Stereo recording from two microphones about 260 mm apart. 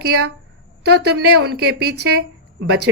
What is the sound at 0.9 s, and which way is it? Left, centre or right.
Speech, right.